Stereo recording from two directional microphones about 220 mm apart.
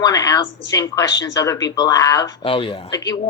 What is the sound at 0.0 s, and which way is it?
A woman's voice, 15° left (ahead or behind).